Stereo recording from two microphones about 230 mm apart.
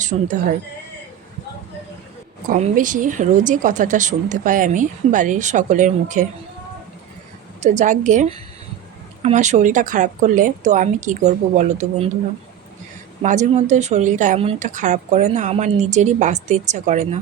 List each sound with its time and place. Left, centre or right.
0.0 s speech: right
2.5 s speech: right
7.6 s speech: right
13.2 s speech: right